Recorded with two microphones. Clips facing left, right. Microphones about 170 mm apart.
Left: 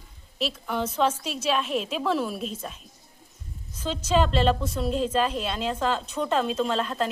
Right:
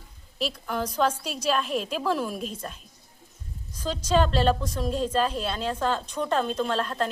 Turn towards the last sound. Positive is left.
turn(degrees=0)  # may be behind; listen again after turning